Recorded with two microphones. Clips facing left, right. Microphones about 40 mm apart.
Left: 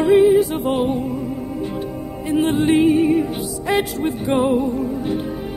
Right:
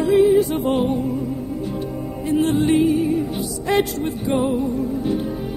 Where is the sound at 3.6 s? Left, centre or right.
Centre.